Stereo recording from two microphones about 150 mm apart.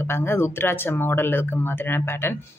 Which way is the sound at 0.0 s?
15° left (ahead or behind).